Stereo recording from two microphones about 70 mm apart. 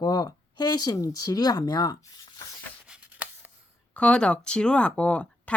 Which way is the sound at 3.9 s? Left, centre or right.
Centre.